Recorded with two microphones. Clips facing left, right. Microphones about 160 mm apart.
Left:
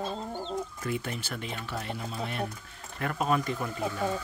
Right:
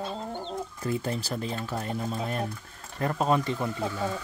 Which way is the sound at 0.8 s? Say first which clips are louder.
Right 4 dB; 35° right (ahead or behind).